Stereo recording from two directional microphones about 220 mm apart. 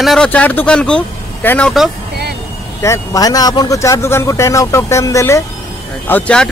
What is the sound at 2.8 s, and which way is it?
Speech, 15° left (ahead or behind).